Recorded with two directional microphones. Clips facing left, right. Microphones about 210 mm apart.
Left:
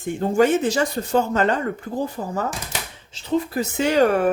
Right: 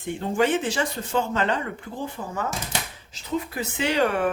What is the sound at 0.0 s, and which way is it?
Speech, 45° left (ahead or behind).